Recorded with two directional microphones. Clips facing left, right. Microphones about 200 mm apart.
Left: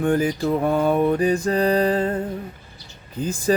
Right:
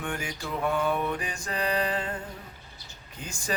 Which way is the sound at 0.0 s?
35° left (ahead or behind).